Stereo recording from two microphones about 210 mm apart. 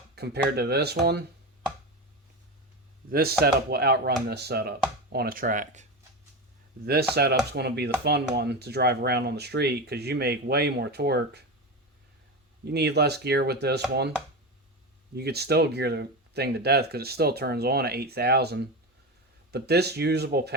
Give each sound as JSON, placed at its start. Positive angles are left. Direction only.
{"t": 0.2, "sound": "speech", "side_deg": -50}
{"t": 3.1, "sound": "speech", "side_deg": -45}
{"t": 7.1, "sound": "speech", "side_deg": -50}
{"t": 12.6, "sound": "speech", "side_deg": -50}
{"t": 15.1, "sound": "speech", "side_deg": -50}